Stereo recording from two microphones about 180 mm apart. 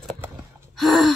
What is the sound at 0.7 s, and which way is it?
Gasp, centre (ahead or behind).